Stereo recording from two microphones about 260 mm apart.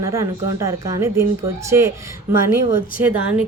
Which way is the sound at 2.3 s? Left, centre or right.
Right.